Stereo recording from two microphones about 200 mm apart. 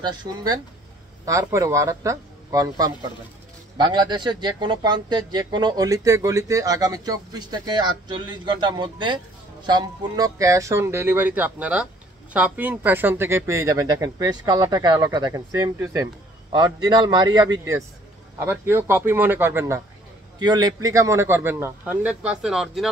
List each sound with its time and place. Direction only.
0.0 s a man's voice: 20° right (ahead or behind); by 22.8 s centre (ahead or behind)